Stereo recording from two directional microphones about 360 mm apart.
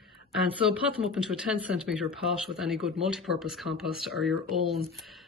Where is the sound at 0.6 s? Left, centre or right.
Centre.